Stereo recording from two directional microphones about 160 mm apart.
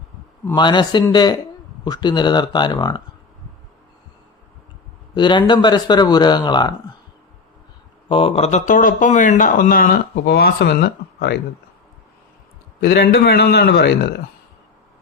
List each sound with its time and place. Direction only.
0.5 s speech: 30° left (ahead or behind)
5.1 s speech: 30° left (ahead or behind)
8.1 s speech: 40° left (ahead or behind); by 11.3 s 85° left
12.8 s a man's voice: 85° left